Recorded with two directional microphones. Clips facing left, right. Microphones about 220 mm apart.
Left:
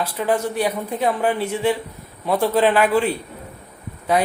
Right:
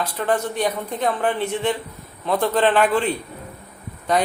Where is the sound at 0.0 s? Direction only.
10° left (ahead or behind).